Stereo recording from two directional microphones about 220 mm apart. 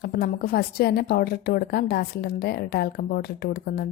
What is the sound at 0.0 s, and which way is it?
A woman's voice, 45° left (ahead or behind).